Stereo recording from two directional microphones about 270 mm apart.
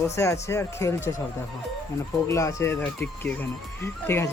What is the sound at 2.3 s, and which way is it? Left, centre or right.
Speech, centre.